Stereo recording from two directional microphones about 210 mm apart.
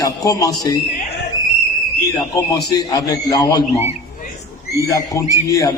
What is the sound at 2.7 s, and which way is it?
Speech, 20° left (ahead or behind).